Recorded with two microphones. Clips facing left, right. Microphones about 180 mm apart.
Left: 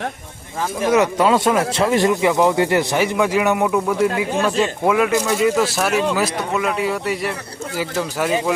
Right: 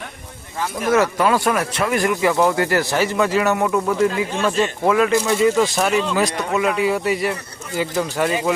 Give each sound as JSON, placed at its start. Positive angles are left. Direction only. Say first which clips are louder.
{"t": 0.9, "sound": "speech", "louder": "left 1 dB", "side_deg": 20}